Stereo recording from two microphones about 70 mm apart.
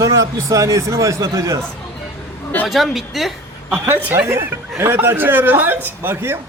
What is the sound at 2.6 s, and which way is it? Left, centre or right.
Speech, centre.